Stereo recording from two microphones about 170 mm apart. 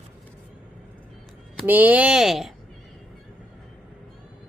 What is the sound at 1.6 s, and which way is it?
Speech, 10° right (ahead or behind).